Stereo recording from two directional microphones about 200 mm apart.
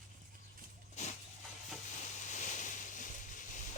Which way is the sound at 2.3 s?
35° left (ahead or behind).